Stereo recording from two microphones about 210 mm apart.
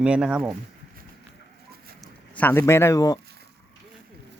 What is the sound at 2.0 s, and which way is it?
Speech, 10° left (ahead or behind).